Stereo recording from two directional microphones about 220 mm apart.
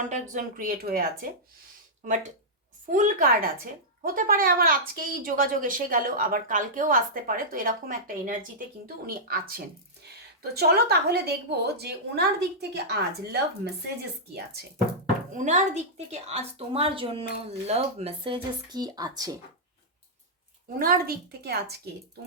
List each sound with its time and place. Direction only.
0.1 s speech: 35° right (ahead or behind)
2.9 s a woman's voice: 40° right (ahead or behind)
15.4 s a woman's voice: 35° right (ahead or behind); by 19.4 s 15° right (ahead or behind)
20.7 s a woman's voice: 40° right (ahead or behind)